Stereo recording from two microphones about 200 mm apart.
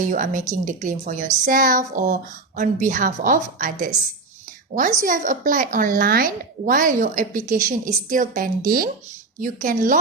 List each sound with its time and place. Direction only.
0.0 s speech: 40° right (ahead or behind)
4.4 s a sound: 40° right (ahead or behind)
4.9 s a woman's voice: 40° right (ahead or behind)